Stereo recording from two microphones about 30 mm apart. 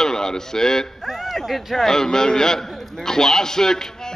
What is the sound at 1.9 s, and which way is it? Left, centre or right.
A man's voice, centre.